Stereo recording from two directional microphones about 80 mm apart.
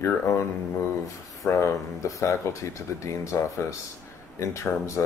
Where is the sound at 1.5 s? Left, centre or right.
Left.